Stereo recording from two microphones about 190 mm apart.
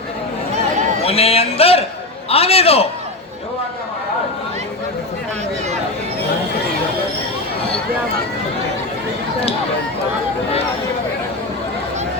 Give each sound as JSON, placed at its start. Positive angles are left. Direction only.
{"t": 1.0, "sound": "a man's voice", "side_deg": 30}